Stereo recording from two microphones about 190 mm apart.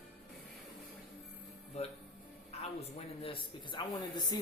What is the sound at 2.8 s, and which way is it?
A man's voice, 30° left (ahead or behind).